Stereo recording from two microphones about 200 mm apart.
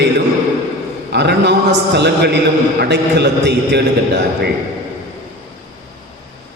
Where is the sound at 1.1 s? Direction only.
55° right (ahead or behind).